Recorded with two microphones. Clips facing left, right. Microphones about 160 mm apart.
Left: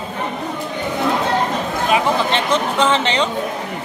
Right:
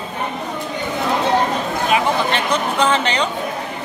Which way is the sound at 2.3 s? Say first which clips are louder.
Left 1 dB; 25° left (ahead or behind).